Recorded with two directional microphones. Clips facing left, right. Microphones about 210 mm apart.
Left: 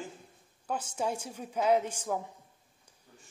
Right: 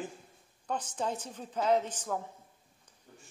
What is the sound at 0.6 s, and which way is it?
A woman's voice, 10° left (ahead or behind).